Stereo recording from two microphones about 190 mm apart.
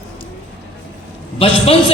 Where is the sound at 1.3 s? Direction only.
30° left (ahead or behind).